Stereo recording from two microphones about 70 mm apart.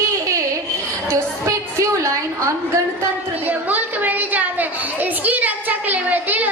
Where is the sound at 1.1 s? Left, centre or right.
Right.